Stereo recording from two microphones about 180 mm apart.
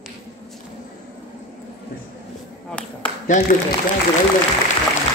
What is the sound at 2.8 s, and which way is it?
Speech, 5° left (ahead or behind).